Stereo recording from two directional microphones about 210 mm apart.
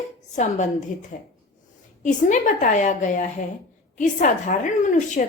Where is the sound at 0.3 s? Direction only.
35° left (ahead or behind).